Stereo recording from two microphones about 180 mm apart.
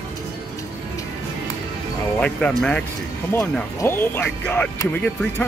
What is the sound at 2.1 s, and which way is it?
Speech, 5° left (ahead or behind).